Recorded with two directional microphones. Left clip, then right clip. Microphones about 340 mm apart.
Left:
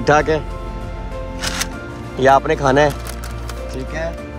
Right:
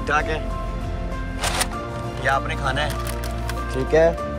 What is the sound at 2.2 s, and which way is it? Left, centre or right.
Speech, centre.